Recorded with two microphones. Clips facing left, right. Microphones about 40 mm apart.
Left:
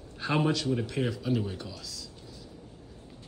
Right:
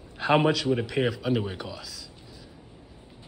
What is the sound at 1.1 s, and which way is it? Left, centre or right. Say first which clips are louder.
Speech: right 3 dB; centre.